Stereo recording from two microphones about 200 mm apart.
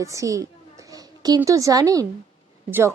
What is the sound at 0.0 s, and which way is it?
A woman's voice, 15° right (ahead or behind).